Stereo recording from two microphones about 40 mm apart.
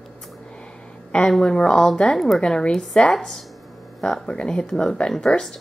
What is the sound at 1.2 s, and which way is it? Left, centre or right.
Speech, centre.